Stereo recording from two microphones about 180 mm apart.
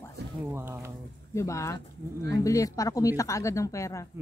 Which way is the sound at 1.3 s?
15° left (ahead or behind).